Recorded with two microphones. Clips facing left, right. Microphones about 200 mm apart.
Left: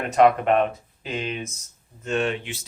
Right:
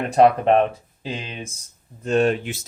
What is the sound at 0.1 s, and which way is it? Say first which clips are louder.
Speech: right 2 dB; 30° right (ahead or behind).